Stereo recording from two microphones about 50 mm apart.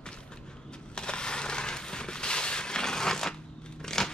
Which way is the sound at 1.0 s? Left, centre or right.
Centre.